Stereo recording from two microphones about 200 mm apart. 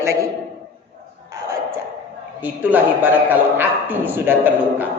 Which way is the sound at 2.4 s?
10° right (ahead or behind).